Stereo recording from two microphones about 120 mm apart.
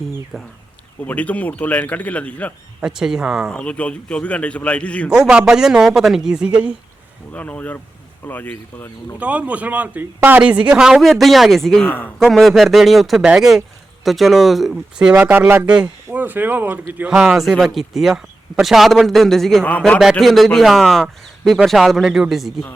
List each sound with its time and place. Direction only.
1.0 s a man's voice: 10° left (ahead or behind)
2.8 s a man's voice: 5° right (ahead or behind)
3.5 s a man's voice: 10° left (ahead or behind)
5.2 s a man's voice: 5° right (ahead or behind)
7.3 s a man's voice: 10° left (ahead or behind)
9.1 s a man's voice: 10° right (ahead or behind); by 12.1 s 15° left (ahead or behind)
12.2 s a man's voice: centre (ahead or behind); by 16.8 s 15° right (ahead or behind)
17.3 s a man's voice: centre (ahead or behind)
20.0 s a man's voice: centre (ahead or behind)